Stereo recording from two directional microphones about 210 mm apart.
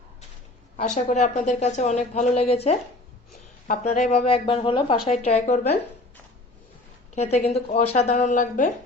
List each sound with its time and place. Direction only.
0.9 s a woman's voice: 35° left (ahead or behind)
7.2 s a woman's voice: 30° left (ahead or behind)